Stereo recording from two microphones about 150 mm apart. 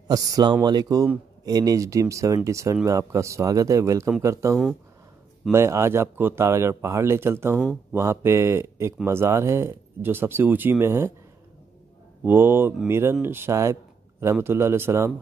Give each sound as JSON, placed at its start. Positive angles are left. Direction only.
{"t": 0.1, "sound": "speech", "side_deg": -25}
{"t": 12.3, "sound": "speech", "side_deg": -15}